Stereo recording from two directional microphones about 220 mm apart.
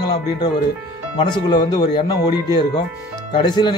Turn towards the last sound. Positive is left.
turn(degrees=20)  # may be behind; listen again after turning